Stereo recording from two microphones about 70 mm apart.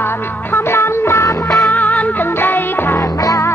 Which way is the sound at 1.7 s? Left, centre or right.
Left.